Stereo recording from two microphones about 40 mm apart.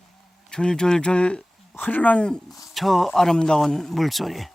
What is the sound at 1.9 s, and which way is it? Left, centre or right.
Speech, left.